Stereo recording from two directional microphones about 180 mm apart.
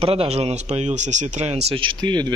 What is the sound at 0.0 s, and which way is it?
Speech, 30° right (ahead or behind).